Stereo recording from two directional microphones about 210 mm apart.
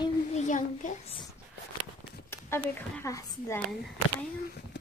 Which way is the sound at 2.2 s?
10° left (ahead or behind).